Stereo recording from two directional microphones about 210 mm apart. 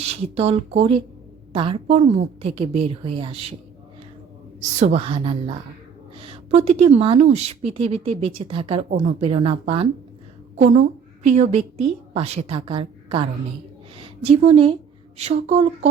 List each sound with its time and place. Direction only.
0.0 s a woman's voice: 30° right (ahead or behind)
4.9 s a woman's voice: 25° right (ahead or behind)